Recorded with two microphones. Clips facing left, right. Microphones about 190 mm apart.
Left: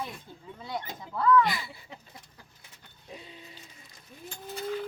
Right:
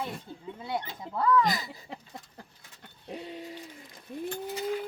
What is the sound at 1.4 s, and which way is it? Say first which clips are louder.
Speech: even; 40° right (ahead or behind).